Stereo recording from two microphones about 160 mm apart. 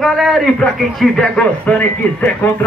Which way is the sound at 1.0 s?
5° left (ahead or behind).